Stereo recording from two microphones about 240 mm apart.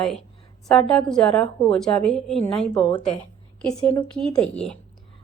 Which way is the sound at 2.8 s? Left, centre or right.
Left.